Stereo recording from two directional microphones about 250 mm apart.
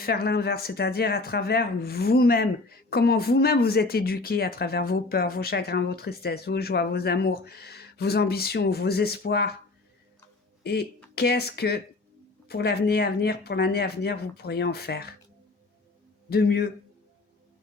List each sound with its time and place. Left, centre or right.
0.0 s speech: left
10.6 s speech: left
16.3 s speech: left